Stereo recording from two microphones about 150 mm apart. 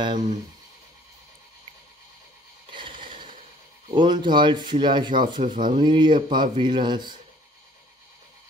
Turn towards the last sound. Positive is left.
turn(degrees=-30)  # may be behind; listen again after turning